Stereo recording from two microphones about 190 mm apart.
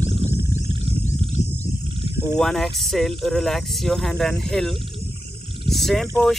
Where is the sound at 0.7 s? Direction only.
30° right (ahead or behind).